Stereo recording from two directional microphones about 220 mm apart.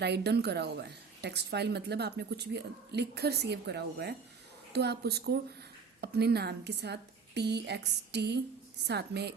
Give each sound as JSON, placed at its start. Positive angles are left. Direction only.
{"t": 0.0, "sound": "a woman's voice", "side_deg": -50}